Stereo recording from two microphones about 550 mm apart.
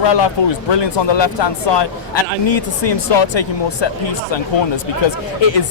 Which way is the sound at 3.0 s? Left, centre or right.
Left.